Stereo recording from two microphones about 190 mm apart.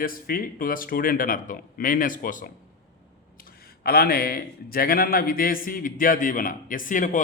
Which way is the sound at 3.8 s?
55° left (ahead or behind).